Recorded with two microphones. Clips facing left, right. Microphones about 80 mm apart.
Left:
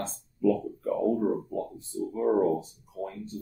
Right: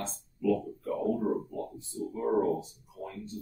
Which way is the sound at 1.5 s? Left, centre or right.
Left.